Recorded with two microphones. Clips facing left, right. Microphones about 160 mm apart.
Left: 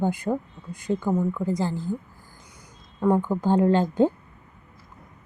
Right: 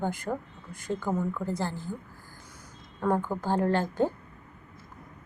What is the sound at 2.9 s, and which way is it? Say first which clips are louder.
Speech: left 5 dB; 15° left (ahead or behind).